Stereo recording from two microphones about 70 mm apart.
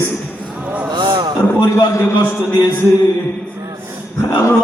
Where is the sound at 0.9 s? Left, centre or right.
Right.